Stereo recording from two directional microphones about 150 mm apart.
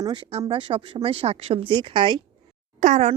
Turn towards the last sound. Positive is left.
turn(degrees=-55)  # may be behind; listen again after turning